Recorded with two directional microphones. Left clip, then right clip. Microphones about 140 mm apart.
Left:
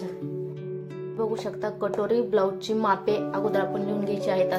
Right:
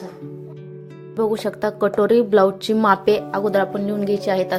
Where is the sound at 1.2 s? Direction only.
65° right (ahead or behind).